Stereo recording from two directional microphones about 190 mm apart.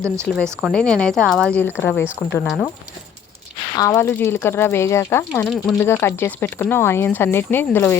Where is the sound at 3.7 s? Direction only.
20° left (ahead or behind); by 5.8 s centre (ahead or behind).